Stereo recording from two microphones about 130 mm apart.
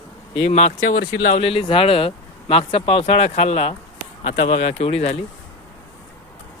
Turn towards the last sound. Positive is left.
turn(degrees=55)  # may be behind; listen again after turning